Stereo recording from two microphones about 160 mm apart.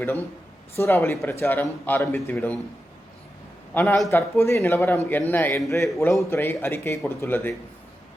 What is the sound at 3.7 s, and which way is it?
Speech, 10° left (ahead or behind).